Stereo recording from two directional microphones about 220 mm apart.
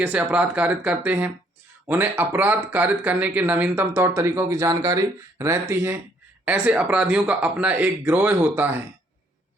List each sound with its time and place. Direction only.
0.0 s speech: 5° right (ahead or behind)